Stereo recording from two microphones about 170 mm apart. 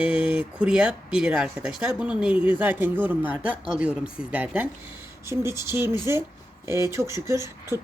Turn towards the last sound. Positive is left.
turn(degrees=-15)  # may be behind; listen again after turning